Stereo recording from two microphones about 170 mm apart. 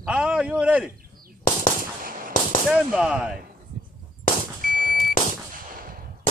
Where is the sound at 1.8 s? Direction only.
55° right (ahead or behind).